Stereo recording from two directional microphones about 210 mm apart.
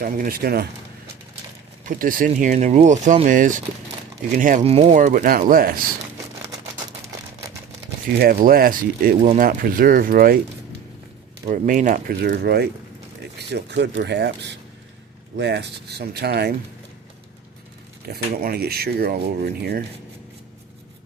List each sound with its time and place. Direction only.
0.0 s speech: 45° right (ahead or behind)
1.8 s speech: 40° right (ahead or behind)
8.2 s speech: 45° right (ahead or behind)
11.4 s speech: 40° right (ahead or behind)
18.1 s speech: 45° right (ahead or behind)